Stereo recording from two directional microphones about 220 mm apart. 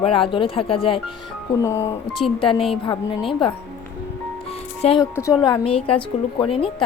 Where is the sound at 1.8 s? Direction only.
25° left (ahead or behind).